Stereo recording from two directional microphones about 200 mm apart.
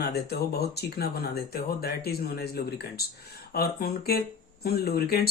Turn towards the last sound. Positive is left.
turn(degrees=50)  # may be behind; listen again after turning